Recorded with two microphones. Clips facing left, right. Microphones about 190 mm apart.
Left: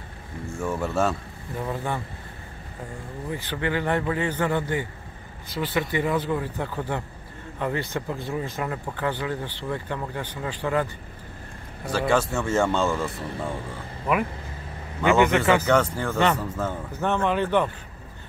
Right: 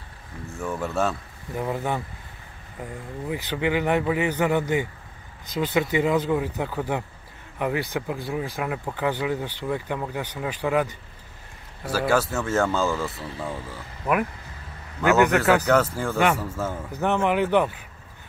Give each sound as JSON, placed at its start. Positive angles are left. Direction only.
{"t": 0.5, "sound": "speech", "side_deg": 0}
{"t": 1.5, "sound": "speech", "side_deg": -20}
{"t": 3.3, "sound": "speech", "side_deg": -15}
{"t": 15.0, "sound": "speech", "side_deg": 0}